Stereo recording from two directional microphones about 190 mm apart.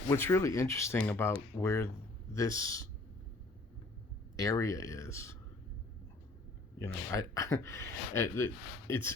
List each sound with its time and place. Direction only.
0.1 s speech: 15° left (ahead or behind)
4.4 s speech: 15° left (ahead or behind)
6.8 s speech: 15° left (ahead or behind)